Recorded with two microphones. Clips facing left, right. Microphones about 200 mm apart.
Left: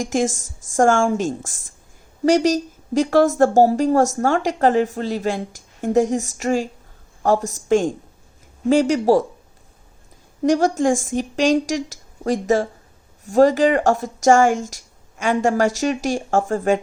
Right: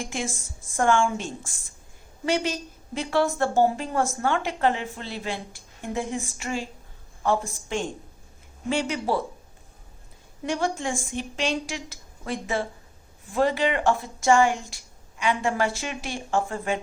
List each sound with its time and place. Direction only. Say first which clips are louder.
0.0 s speech: left 11 dB; 45° left (ahead or behind)
0.3 s speech: left 7 dB; 90° left
0.8 s a woman's voice: left 6 dB; 45° left (ahead or behind)
7.7 s speech: left 12 dB; 45° left (ahead or behind)
10.4 s speech: left 10 dB; 45° left (ahead or behind)